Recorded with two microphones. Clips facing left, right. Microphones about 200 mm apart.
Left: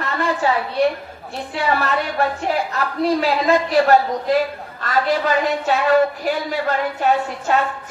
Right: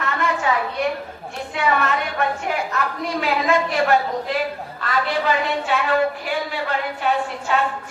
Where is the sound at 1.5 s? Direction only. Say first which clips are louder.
Left 1 dB; 35° left (ahead or behind).